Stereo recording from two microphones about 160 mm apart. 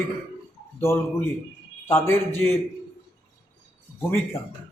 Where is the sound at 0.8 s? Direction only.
15° left (ahead or behind).